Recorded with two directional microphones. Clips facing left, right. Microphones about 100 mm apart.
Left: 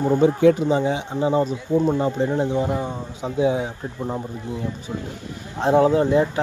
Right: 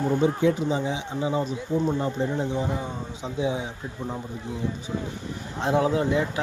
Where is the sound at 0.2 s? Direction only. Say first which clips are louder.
Left 6 dB; 65° left (ahead or behind).